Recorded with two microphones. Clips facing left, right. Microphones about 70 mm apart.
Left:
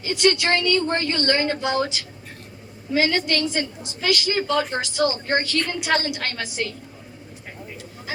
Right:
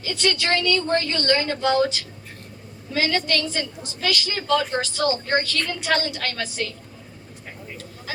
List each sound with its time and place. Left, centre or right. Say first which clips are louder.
0.0 s a woman's voice: left 4 dB; left